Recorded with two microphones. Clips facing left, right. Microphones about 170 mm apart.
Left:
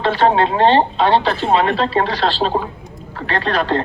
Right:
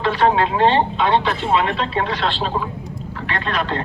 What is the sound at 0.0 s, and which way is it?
Speech, 30° left (ahead or behind).